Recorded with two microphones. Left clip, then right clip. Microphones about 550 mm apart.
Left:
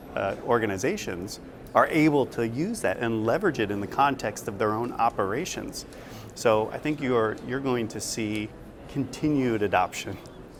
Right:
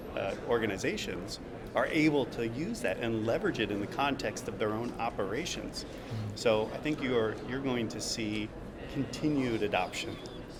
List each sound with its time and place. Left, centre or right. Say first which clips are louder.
0.1 s speech: left 6 dB; left